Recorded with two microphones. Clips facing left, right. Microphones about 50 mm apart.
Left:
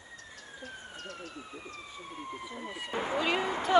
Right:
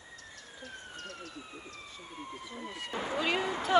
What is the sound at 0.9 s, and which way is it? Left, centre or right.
Speech, left.